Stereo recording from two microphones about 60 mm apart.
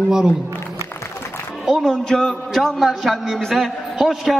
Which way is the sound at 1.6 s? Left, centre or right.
Centre.